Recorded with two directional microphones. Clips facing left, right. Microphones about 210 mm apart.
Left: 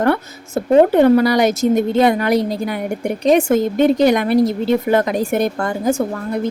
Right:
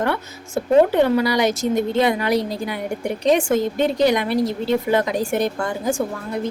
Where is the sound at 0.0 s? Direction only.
45° left (ahead or behind).